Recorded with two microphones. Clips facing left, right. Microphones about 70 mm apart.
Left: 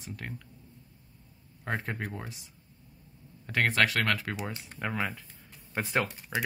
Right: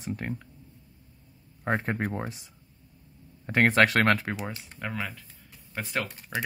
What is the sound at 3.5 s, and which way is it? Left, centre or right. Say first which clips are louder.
Speech: right 5 dB; right.